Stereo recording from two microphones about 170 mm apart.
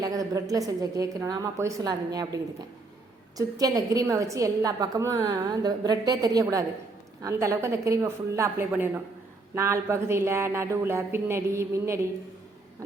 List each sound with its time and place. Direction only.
0.0 s a woman's voice: 20° right (ahead or behind)